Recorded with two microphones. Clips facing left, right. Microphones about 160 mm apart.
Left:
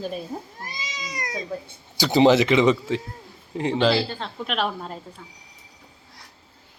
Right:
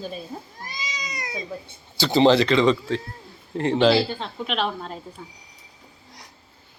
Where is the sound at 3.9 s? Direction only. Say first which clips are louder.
Right 3 dB; 10° right (ahead or behind).